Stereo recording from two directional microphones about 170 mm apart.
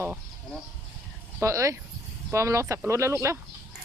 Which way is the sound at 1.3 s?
15° right (ahead or behind).